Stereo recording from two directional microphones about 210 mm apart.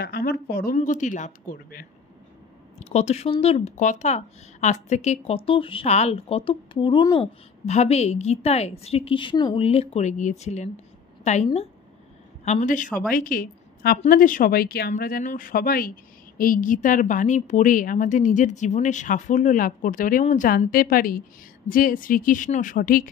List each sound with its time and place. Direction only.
0.0 s speech: 50° left (ahead or behind)
2.8 s a woman's voice: 30° left (ahead or behind)
12.4 s speech: 40° left (ahead or behind)